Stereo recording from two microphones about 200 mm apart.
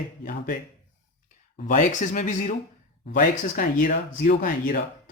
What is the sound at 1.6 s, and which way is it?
Speech, 40° left (ahead or behind).